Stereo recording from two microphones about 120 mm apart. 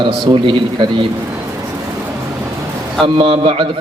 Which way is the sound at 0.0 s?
40° right (ahead or behind).